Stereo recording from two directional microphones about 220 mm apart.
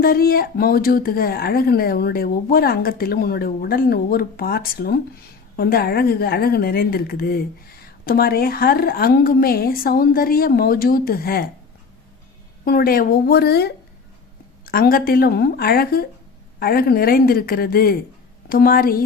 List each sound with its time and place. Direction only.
0.0 s speech: 40° left (ahead or behind)
12.6 s a woman's voice: 45° left (ahead or behind)